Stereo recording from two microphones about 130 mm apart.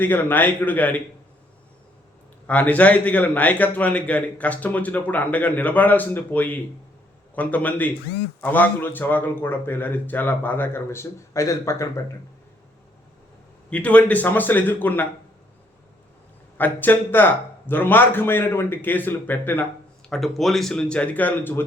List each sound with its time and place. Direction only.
0.0 s a man's voice: 15° left (ahead or behind)
2.5 s a man's voice: 10° left (ahead or behind)
13.7 s a man's voice: 10° left (ahead or behind)
16.6 s a man's voice: 15° left (ahead or behind)
20.1 s a man's voice: centre (ahead or behind)